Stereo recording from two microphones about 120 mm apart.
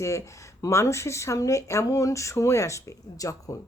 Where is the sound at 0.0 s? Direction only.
25° left (ahead or behind).